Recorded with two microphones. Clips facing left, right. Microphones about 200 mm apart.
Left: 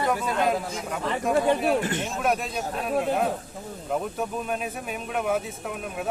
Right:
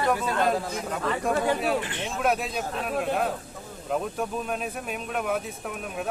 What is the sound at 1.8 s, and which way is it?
Speech, 45° left (ahead or behind).